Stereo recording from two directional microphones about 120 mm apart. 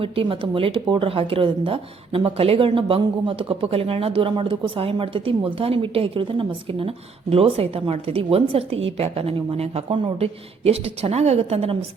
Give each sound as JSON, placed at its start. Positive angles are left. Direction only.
{"t": 0.0, "sound": "speech", "side_deg": -50}